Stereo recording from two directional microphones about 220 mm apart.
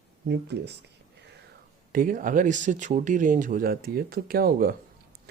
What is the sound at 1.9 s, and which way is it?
Speech, 40° right (ahead or behind).